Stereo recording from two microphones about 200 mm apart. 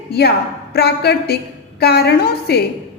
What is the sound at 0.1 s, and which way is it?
A woman's voice, 55° left (ahead or behind).